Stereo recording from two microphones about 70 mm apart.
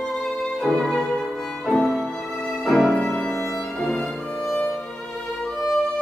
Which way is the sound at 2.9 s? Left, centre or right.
Centre.